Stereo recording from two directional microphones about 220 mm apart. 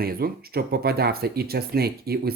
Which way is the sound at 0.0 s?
45° right (ahead or behind).